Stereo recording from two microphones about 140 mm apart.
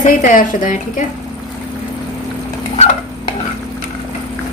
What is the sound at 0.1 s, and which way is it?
Speech, 75° left (ahead or behind).